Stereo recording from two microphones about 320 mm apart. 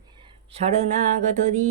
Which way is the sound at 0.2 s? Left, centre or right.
Centre.